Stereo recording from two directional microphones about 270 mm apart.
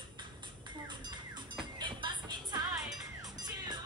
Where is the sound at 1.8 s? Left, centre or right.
Centre.